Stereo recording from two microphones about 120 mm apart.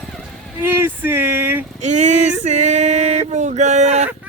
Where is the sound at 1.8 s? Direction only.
75° right (ahead or behind).